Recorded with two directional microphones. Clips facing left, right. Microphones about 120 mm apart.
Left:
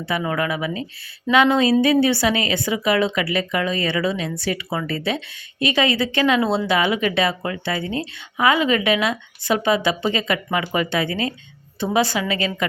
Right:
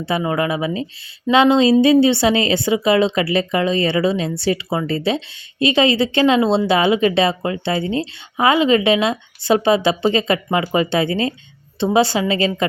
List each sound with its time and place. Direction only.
0.2 s a woman's voice: 25° right (ahead or behind)